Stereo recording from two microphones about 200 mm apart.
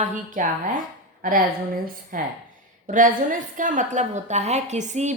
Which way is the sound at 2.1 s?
45° right (ahead or behind).